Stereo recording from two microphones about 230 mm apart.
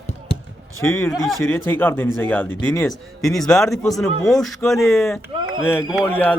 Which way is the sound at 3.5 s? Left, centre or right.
Centre.